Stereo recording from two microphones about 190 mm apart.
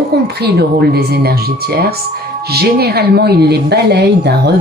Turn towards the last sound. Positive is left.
turn(degrees=-60)  # may be behind; listen again after turning